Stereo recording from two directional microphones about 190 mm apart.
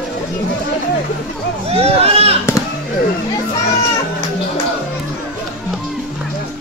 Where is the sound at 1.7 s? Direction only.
30° right (ahead or behind).